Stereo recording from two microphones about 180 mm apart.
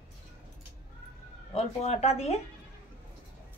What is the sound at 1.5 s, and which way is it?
Speech, 35° left (ahead or behind).